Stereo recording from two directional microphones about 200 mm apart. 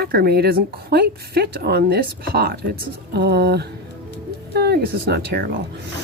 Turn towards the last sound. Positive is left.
turn(degrees=-50)  # may be behind; listen again after turning